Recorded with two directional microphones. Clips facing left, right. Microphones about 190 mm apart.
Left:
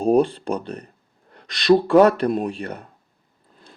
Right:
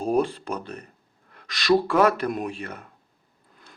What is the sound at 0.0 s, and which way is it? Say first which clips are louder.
Speech: left 6 dB; 30° left (ahead or behind).